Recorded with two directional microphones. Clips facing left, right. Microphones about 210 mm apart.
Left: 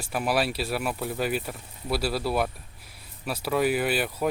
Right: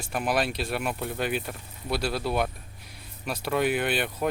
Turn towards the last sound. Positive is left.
turn(degrees=5)  # may be behind; listen again after turning